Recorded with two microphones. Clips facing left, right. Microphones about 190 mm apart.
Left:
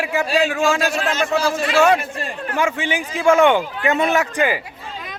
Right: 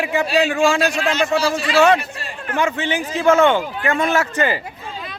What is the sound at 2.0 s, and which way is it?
Speech, 50° left (ahead or behind).